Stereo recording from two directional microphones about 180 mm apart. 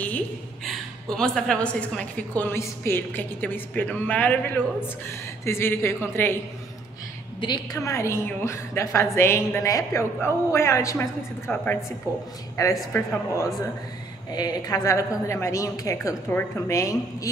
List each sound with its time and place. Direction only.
0.7 s a woman's voice: centre (ahead or behind)
7.3 s a woman's voice: 25° left (ahead or behind)
14.3 s a woman's voice: 20° left (ahead or behind)